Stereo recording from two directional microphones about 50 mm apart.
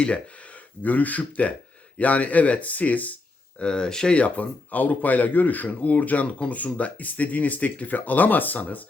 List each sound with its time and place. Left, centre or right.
0.0 s a man's voice: left
3.6 s a man's voice: centre